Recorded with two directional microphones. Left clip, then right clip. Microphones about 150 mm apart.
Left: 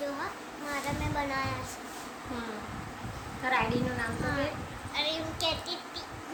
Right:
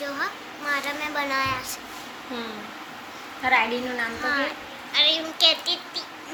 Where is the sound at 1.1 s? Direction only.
Centre (ahead or behind).